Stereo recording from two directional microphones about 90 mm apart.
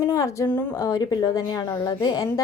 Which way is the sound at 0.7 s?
40° left (ahead or behind).